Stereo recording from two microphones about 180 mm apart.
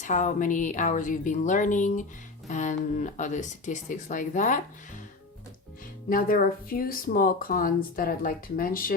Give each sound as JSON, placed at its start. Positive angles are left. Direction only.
{"t": 0.0, "sound": "speech", "side_deg": 45}
{"t": 6.1, "sound": "speech", "side_deg": 50}